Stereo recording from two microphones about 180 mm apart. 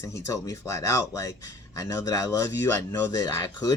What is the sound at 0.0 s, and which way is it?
Speech, 15° left (ahead or behind).